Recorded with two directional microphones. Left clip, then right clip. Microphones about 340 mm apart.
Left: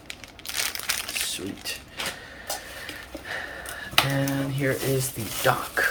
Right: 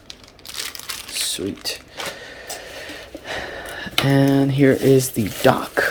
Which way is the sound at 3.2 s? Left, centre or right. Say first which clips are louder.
Right 5 dB; right.